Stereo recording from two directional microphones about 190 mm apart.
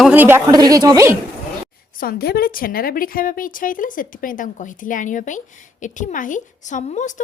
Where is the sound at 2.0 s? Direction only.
50° left (ahead or behind).